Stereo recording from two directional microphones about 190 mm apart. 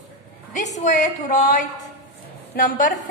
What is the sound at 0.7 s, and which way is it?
A woman's voice, 40° left (ahead or behind).